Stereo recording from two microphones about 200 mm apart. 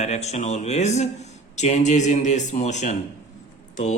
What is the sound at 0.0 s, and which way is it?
A man's voice, 35° left (ahead or behind).